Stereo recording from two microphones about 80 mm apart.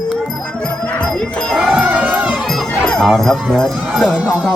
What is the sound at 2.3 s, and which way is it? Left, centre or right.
Music, centre.